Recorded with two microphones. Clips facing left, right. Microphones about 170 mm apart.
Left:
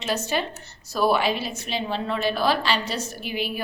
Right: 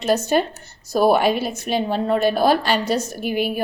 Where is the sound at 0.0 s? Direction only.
45° right (ahead or behind).